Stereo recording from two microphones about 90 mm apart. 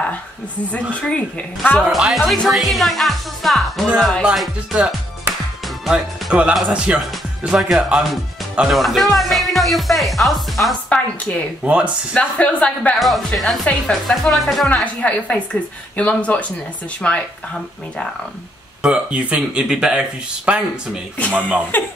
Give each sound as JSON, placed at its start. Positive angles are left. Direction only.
{"t": 1.1, "sound": "a woman's voice", "side_deg": 15}
{"t": 1.9, "sound": "speech", "side_deg": -5}
{"t": 7.5, "sound": "speech", "side_deg": -5}
{"t": 10.9, "sound": "a sound", "side_deg": 15}
{"t": 11.6, "sound": "speech", "side_deg": -15}
{"t": 12.1, "sound": "a woman's voice", "side_deg": 15}
{"t": 13.0, "sound": "speech", "side_deg": 0}
{"t": 14.7, "sound": "a woman's voice", "side_deg": 15}
{"t": 18.8, "sound": "speech", "side_deg": -10}